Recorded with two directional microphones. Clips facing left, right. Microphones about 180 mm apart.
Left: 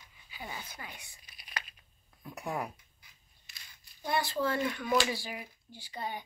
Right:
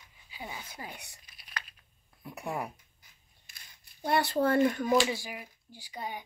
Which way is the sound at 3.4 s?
55° right (ahead or behind).